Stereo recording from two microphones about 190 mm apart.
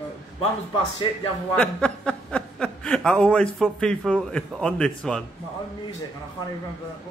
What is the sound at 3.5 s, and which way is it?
A man's voice, centre (ahead or behind).